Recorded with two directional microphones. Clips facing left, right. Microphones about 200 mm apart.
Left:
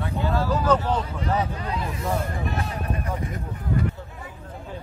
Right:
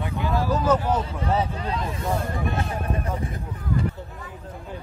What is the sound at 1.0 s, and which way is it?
Speech, 25° right (ahead or behind).